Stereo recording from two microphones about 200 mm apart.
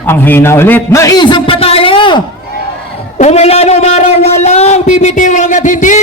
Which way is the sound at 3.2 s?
35° left (ahead or behind).